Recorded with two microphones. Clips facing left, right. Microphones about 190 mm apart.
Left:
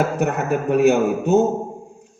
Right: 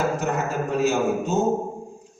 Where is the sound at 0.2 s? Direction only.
65° left (ahead or behind).